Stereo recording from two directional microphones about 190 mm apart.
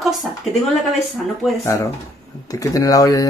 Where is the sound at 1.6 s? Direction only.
15° left (ahead or behind).